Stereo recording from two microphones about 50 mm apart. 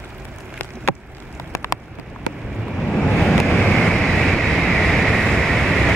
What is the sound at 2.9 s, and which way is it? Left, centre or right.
Vehicle, centre.